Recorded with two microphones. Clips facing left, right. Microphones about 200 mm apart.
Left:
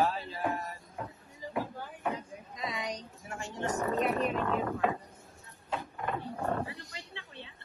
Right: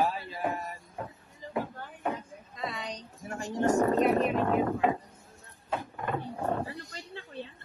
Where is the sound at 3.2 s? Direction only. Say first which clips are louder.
Right 8 dB; 35° right (ahead or behind).